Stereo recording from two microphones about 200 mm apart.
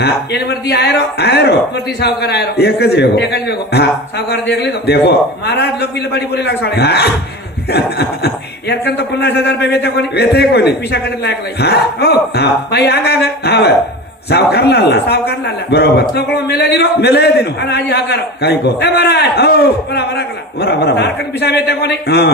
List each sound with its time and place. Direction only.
0.0 s a man's voice: 55° left (ahead or behind)